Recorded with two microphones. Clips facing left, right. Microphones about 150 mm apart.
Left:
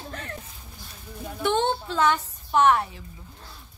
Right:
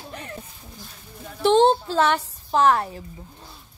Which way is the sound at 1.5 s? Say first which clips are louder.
Right 9 dB; 30° right (ahead or behind).